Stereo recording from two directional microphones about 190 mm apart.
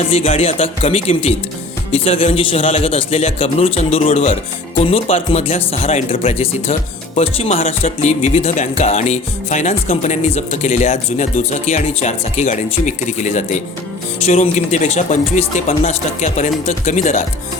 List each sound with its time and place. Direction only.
0.1 s speech: 30° left (ahead or behind)